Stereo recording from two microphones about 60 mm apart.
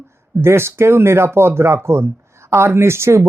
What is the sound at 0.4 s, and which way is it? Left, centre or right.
Speech, right.